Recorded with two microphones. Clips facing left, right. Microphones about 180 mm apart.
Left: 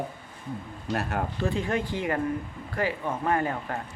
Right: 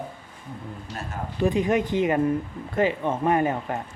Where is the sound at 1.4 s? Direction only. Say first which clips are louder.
Right 8 dB; 15° right (ahead or behind).